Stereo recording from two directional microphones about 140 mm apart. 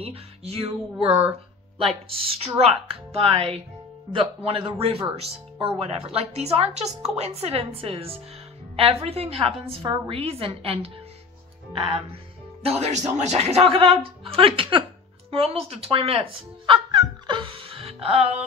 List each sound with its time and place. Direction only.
0.0 s speech: 45° right (ahead or behind)
1.8 s a man's voice: 40° right (ahead or behind)
12.6 s speech: 50° right (ahead or behind)
15.3 s music: 45° right (ahead or behind)